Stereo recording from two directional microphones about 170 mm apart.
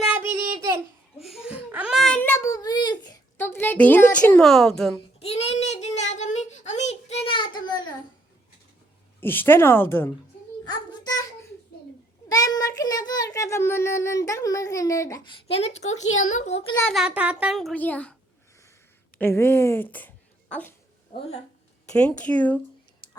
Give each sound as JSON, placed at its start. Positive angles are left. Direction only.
{"t": 0.0, "sound": "child singing", "side_deg": -10}
{"t": 1.2, "sound": "a sound", "side_deg": -5}
{"t": 3.3, "sound": "speech", "side_deg": 10}
{"t": 5.2, "sound": "child singing", "side_deg": 40}
{"t": 9.2, "sound": "a woman's voice", "side_deg": 10}
{"t": 10.7, "sound": "a sound", "side_deg": 25}
{"t": 12.3, "sound": "a child's voice", "side_deg": 20}
{"t": 15.4, "sound": "a child's voice", "side_deg": 35}
{"t": 16.8, "sound": "a child's voice", "side_deg": 0}
{"t": 19.2, "sound": "a woman's voice", "side_deg": 15}
{"t": 21.1, "sound": "speech", "side_deg": 40}
{"t": 21.8, "sound": "a woman's voice", "side_deg": 5}